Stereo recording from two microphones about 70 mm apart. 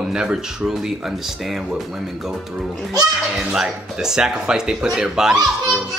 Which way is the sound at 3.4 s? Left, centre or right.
Centre.